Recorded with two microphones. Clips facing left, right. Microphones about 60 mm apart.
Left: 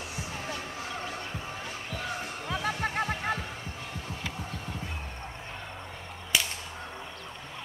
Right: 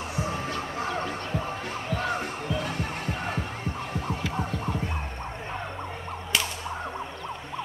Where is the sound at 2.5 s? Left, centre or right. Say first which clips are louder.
Left 4 dB; left.